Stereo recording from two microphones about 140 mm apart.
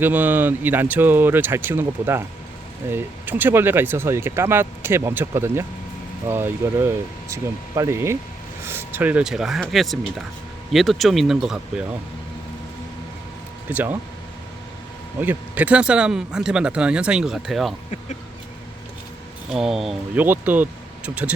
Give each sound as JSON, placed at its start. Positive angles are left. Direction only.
{"t": 0.0, "sound": "speech", "side_deg": -15}
{"t": 13.7, "sound": "speech", "side_deg": -15}
{"t": 15.2, "sound": "speech", "side_deg": -15}
{"t": 19.5, "sound": "speech", "side_deg": -5}
{"t": 20.1, "sound": "speech", "side_deg": -15}